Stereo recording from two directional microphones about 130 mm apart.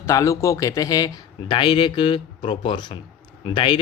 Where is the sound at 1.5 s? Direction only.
40° left (ahead or behind).